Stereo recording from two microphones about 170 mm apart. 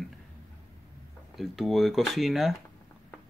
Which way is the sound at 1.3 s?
Centre (ahead or behind).